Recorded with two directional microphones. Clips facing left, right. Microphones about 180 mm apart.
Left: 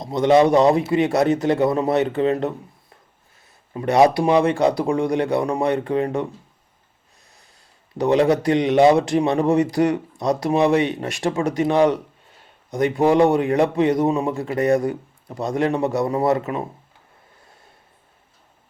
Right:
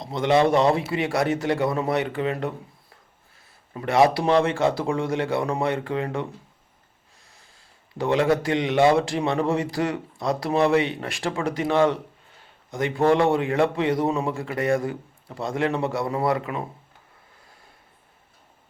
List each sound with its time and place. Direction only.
0.0 s a man's voice: 20° left (ahead or behind)
3.8 s speech: 20° left (ahead or behind)
7.9 s a man's voice: 20° left (ahead or behind)